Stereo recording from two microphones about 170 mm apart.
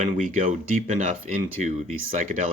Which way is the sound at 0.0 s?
50° right (ahead or behind).